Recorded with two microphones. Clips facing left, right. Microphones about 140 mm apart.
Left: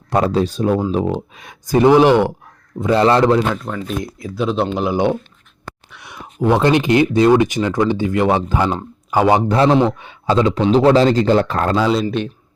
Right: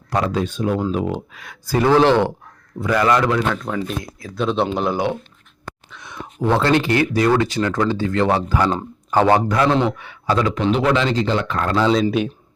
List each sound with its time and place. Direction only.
0.1 s a man's voice: 30° left (ahead or behind); by 2.3 s 15° left (ahead or behind)
2.7 s speech: 25° left (ahead or behind)
3.5 s speech: centre (ahead or behind)
5.9 s speech: 10° left (ahead or behind)
8.7 s speech: 10° left (ahead or behind)
9.5 s a man's voice: 25° left (ahead or behind)
12.2 s speech: 10° right (ahead or behind)